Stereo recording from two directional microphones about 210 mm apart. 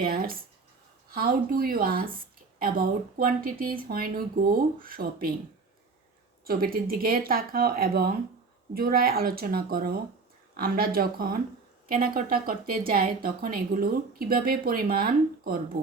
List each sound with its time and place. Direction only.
0.0 s a sound: 45° right (ahead or behind)
1.1 s speech: 45° right (ahead or behind)
6.4 s speech: 45° right (ahead or behind)